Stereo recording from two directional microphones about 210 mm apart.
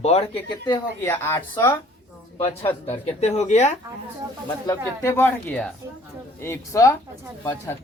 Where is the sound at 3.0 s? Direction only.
30° left (ahead or behind).